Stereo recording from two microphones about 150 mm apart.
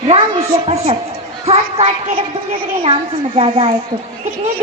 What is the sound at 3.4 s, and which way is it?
Speech, 35° right (ahead or behind).